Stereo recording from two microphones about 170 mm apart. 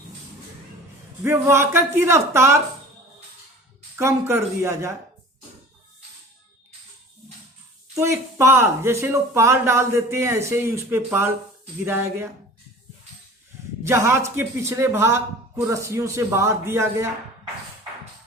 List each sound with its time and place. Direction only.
1.2 s speech: 15° right (ahead or behind)
3.9 s speech: 15° right (ahead or behind)
7.9 s speech: 15° right (ahead or behind)
13.8 s speech: 15° right (ahead or behind)